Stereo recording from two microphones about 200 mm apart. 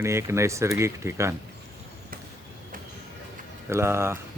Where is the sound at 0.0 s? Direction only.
15° right (ahead or behind).